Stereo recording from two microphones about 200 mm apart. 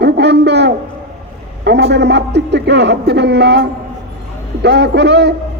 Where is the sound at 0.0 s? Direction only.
60° right (ahead or behind).